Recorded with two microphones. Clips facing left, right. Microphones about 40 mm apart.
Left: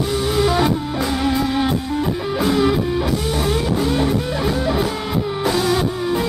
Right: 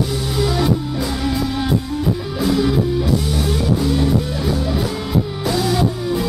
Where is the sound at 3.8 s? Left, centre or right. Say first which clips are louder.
Right 1 dB; centre.